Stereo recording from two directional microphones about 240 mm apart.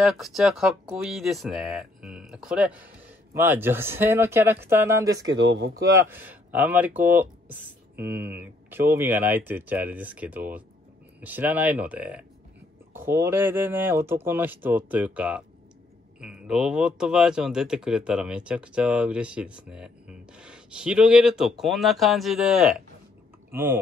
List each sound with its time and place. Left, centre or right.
0.0 s speech: centre
5.3 s speech: right
5.9 s speech: centre